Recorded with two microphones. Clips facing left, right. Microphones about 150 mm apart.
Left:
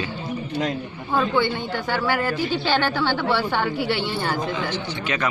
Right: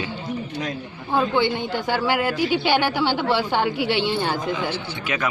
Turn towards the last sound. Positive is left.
turn(degrees=-10)  # may be behind; listen again after turning